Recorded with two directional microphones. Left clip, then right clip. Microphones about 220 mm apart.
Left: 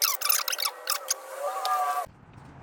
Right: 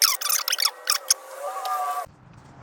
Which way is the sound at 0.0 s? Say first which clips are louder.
Right 4 dB; 10° right (ahead or behind).